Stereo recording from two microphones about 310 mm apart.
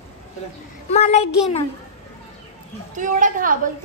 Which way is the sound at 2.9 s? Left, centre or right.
Right.